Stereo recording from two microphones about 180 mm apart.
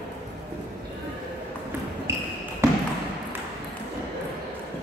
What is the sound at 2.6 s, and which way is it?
Trickle, 15° right (ahead or behind).